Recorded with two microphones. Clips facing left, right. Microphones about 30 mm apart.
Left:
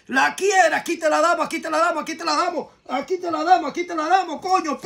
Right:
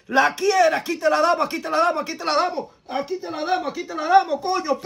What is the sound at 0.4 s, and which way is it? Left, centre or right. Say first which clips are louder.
Speech: left 1 dB; right.